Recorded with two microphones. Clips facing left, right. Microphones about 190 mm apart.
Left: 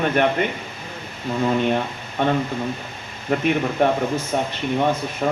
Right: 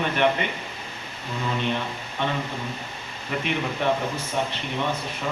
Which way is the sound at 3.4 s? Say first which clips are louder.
Left 6 dB; 50° left (ahead or behind).